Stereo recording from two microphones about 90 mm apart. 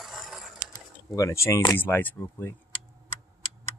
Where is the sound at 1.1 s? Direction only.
30° left (ahead or behind).